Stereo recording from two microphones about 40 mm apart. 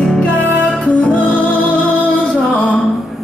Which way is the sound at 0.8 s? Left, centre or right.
Left.